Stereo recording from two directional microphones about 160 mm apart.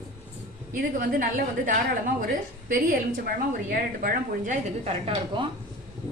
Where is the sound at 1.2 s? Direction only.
60° right (ahead or behind); by 5.4 s 40° right (ahead or behind).